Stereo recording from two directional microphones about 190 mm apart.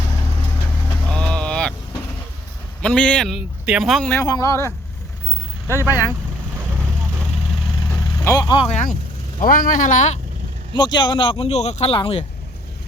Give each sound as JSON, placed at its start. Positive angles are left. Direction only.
{"t": 1.1, "sound": "vehicle", "side_deg": 5}
{"t": 2.8, "sound": "speech", "side_deg": 5}
{"t": 5.6, "sound": "speech", "side_deg": -10}
{"t": 7.9, "sound": "vehicle", "side_deg": 15}
{"t": 9.4, "sound": "speech", "side_deg": 45}
{"t": 10.8, "sound": "speech", "side_deg": 20}